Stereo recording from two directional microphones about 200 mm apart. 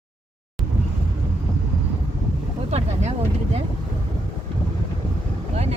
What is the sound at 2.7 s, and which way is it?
Vehicle, 30° right (ahead or behind).